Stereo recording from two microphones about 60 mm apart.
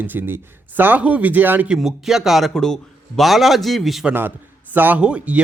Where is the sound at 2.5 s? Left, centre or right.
Centre.